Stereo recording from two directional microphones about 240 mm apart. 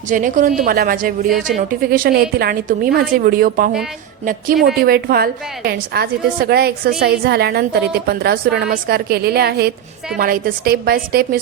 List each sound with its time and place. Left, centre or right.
0.1 s a woman's voice: right